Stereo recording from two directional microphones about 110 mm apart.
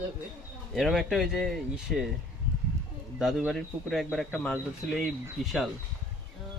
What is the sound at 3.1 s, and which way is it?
A man's voice, 5° right (ahead or behind).